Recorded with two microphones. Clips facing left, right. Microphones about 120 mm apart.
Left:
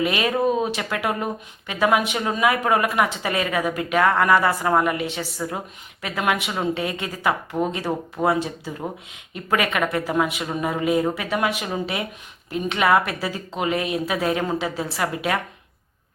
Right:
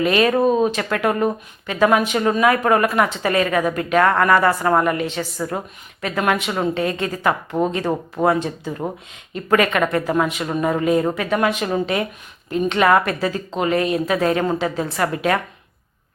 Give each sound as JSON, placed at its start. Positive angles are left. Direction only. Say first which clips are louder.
{"t": 0.0, "sound": "speech", "louder": "right 5 dB", "side_deg": 10}
{"t": 7.6, "sound": "speech", "louder": "right 4 dB", "side_deg": -30}
{"t": 8.2, "sound": "speech", "louder": "right 3 dB", "side_deg": 10}